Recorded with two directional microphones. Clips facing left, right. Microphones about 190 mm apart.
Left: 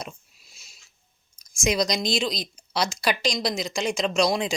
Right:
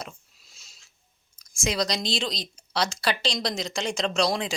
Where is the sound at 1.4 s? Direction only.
15° left (ahead or behind).